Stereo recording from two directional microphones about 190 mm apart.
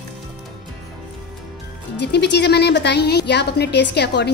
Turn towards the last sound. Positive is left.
turn(degrees=60)  # may be behind; listen again after turning